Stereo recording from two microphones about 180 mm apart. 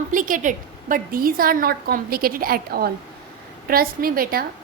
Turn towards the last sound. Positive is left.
turn(degrees=-55)  # may be behind; listen again after turning